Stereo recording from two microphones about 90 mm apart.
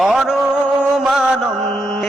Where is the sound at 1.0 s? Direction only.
5° right (ahead or behind).